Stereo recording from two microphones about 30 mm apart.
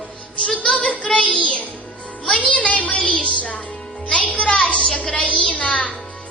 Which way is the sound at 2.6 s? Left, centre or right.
Left.